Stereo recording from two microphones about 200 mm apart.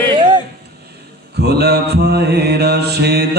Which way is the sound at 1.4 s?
55° right (ahead or behind).